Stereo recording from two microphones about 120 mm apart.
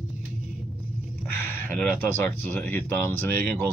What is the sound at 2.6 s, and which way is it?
Speech, 15° left (ahead or behind).